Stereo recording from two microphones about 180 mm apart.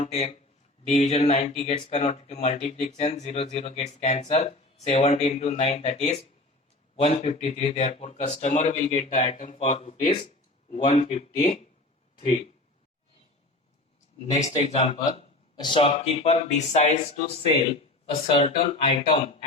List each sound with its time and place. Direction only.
0.0 s speech: 35° left (ahead or behind)
14.3 s speech: 35° left (ahead or behind)